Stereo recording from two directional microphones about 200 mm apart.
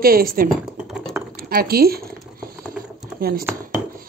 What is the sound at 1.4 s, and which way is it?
Speech, 50° right (ahead or behind).